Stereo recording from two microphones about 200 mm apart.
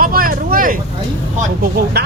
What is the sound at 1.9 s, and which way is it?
Speech, 55° right (ahead or behind).